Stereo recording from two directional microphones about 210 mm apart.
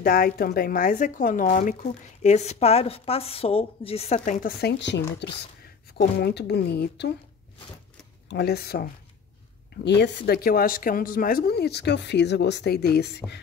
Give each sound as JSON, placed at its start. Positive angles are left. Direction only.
{"t": 0.0, "sound": "a woman's voice", "side_deg": 45}
{"t": 4.2, "sound": "speech", "side_deg": 45}
{"t": 8.3, "sound": "speech", "side_deg": 50}
{"t": 9.8, "sound": "speech", "side_deg": 55}